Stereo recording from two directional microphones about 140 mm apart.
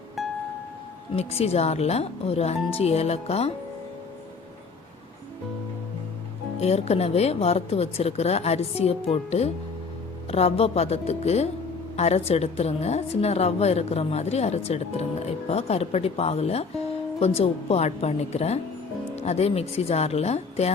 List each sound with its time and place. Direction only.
0.2 s music: centre (ahead or behind)
1.1 s a woman's voice: 45° left (ahead or behind)
6.6 s a woman's voice: 50° left (ahead or behind)